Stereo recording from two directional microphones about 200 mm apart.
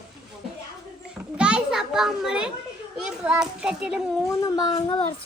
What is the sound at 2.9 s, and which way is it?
Speech, 5° right (ahead or behind).